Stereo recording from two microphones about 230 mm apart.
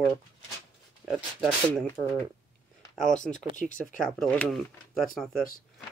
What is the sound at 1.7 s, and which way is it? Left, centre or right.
Speech, centre.